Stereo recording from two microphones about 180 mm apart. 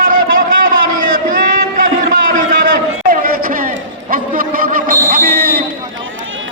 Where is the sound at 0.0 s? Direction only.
50° right (ahead or behind).